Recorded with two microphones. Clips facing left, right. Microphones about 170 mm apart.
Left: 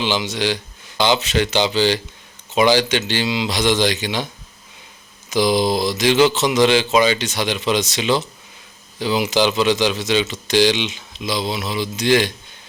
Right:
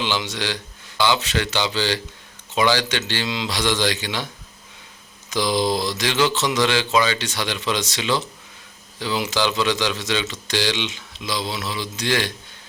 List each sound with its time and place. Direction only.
0.0 s speech: 15° left (ahead or behind)
5.3 s speech: 15° left (ahead or behind)